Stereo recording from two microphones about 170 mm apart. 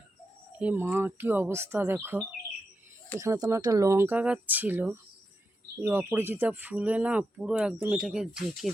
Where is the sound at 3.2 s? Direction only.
20° right (ahead or behind).